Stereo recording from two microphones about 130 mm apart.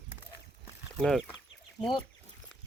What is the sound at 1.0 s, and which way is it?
Speech, centre (ahead or behind).